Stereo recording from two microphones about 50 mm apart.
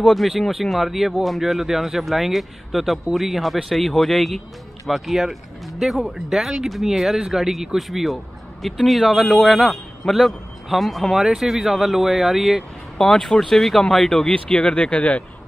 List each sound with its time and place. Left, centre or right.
0.1 s speech: centre
12.9 s speech: centre
14.3 s speech: left